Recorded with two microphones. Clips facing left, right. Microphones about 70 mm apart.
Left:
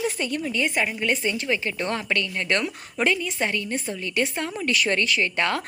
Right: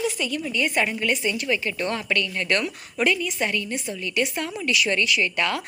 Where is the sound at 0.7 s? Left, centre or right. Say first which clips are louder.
Right 2 dB; centre.